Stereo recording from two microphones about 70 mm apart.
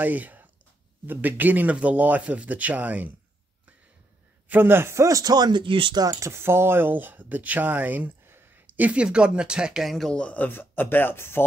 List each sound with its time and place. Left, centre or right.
0.0 s speech: right
4.5 s speech: right
6.1 s speech: right; by 9.9 s centre
10.1 s speech: centre; by 11.4 s left